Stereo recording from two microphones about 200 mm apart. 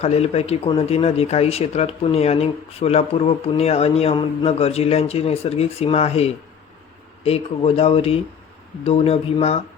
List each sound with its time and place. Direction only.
0.0 s speech: 30° left (ahead or behind)